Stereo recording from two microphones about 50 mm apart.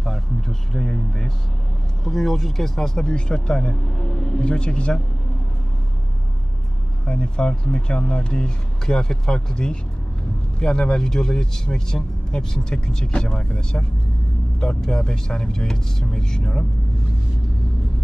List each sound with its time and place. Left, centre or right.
0.0 s a sound: centre
2.0 s speech: centre; by 5.0 s left
7.1 s speech: centre